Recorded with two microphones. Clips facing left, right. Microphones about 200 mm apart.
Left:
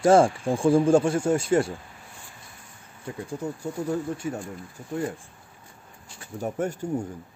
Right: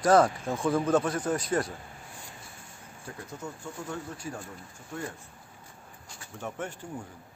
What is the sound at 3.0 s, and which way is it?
Speech, 30° left (ahead or behind).